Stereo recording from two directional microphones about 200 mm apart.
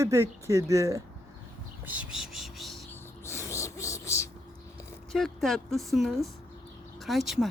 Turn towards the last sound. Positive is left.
turn(degrees=0)  # may be behind; listen again after turning